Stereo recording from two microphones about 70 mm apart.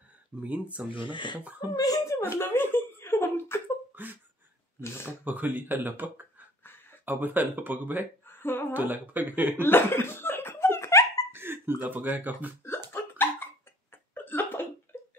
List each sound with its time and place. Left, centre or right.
0.4 s speech: right
1.7 s speech: left
2.4 s speech: left
3.9 s whimper: right
4.7 s speech: left
5.2 s speech: right
8.3 s a sound: left
8.7 s speech: right
9.6 s laughter: left
11.3 s speech: right
12.9 s a sound: left